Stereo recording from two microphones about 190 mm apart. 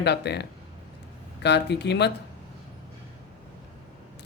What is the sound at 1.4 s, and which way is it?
Speech, 65° left (ahead or behind).